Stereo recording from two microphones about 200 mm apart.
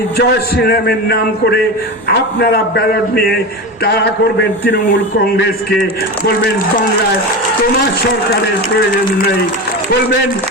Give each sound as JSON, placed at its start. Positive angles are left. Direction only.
{"t": 0.2, "sound": "a man's voice", "side_deg": 50}